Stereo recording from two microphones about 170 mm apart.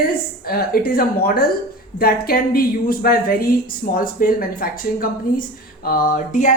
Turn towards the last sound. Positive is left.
turn(degrees=45)  # may be behind; listen again after turning